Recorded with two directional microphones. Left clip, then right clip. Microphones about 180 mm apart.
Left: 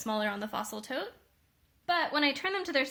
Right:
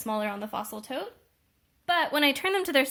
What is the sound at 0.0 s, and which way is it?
Speech, 30° right (ahead or behind).